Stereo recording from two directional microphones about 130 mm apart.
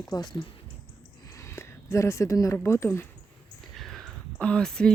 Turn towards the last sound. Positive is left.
turn(degrees=5)  # may be behind; listen again after turning